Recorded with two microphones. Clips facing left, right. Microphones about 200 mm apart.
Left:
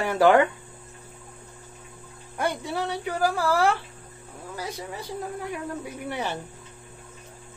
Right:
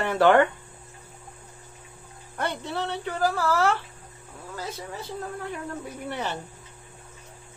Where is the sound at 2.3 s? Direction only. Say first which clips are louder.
Left 2 dB; 10° left (ahead or behind).